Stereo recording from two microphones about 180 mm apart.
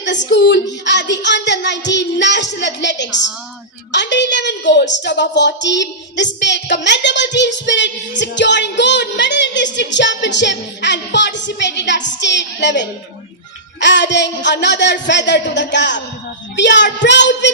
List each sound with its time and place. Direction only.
0.0 s child singing: 80° left
6.4 s a woman's voice: 80° left
6.8 s child singing: 80° left